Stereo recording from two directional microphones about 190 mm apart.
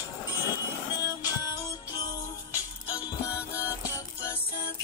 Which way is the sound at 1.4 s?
20° left (ahead or behind).